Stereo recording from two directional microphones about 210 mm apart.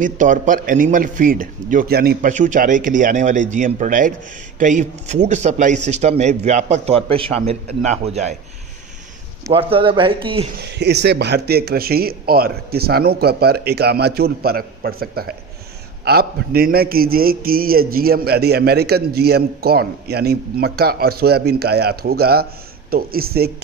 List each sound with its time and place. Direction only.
0.0 s a man's voice: 40° right (ahead or behind)
9.5 s speech: 25° right (ahead or behind)
10.6 s a man's voice: 55° right (ahead or behind)